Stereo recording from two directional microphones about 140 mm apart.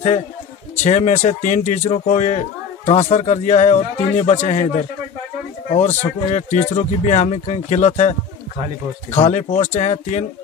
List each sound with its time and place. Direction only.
0.8 s speech: 55° left (ahead or behind)
5.8 s speech: 55° left (ahead or behind)
9.1 s speech: 45° left (ahead or behind)